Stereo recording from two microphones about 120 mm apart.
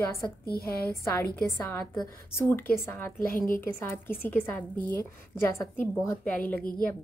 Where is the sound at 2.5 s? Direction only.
20° left (ahead or behind).